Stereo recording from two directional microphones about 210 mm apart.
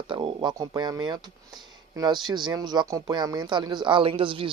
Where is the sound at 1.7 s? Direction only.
20° right (ahead or behind).